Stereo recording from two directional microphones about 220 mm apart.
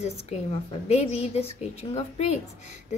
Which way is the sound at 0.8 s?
30° left (ahead or behind).